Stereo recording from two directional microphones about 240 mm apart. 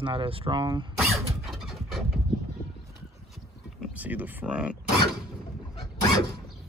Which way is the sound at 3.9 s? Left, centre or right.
Centre.